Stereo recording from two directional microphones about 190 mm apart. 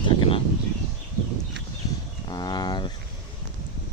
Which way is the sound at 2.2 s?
20° left (ahead or behind).